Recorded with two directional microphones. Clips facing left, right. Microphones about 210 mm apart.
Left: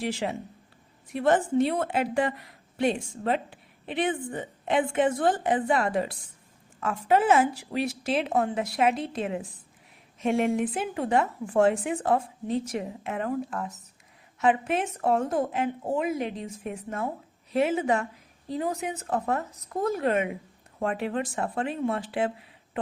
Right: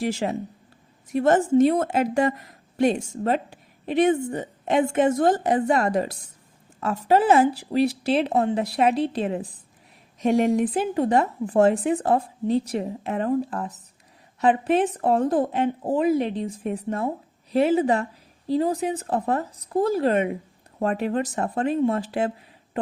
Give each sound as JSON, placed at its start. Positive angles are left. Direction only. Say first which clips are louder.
{"t": 0.0, "sound": "speech", "louder": "right 4 dB", "side_deg": -45}